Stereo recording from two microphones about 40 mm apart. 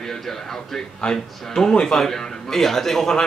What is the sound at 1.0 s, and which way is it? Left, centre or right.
Speech, left.